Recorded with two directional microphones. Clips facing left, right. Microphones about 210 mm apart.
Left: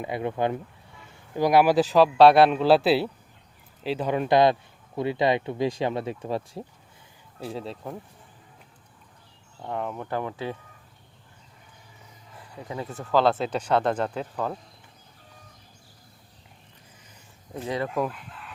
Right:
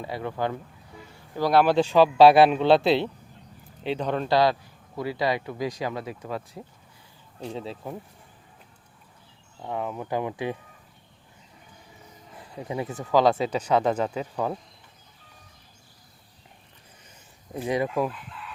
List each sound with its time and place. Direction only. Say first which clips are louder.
0.0 s speech: left 3 dB; 20° left (ahead or behind)
7.3 s speech: even; 5° left (ahead or behind)
9.6 s speech: even; 5° right (ahead or behind)
10.1 s speech: right 2 dB; 15° right (ahead or behind)
12.5 s speech: right 3 dB; 20° right (ahead or behind)
17.5 s speech: right 3 dB; 15° right (ahead or behind)